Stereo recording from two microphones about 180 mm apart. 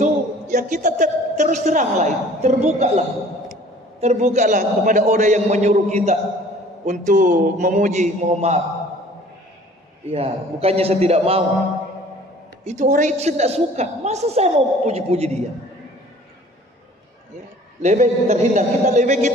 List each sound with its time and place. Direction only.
0.0 s a man's voice: 45° right (ahead or behind)
4.0 s a woman's voice: 40° right (ahead or behind)
10.0 s a woman's voice: 35° right (ahead or behind)
12.6 s a woman's voice: 40° right (ahead or behind)
17.8 s a woman's voice: 40° right (ahead or behind)